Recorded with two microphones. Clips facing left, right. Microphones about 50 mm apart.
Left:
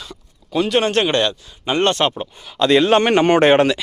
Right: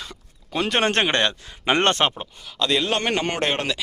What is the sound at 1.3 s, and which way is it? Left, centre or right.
Speech, right.